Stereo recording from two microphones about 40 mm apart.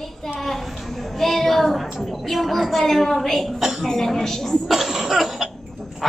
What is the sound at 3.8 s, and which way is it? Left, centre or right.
Speech, centre.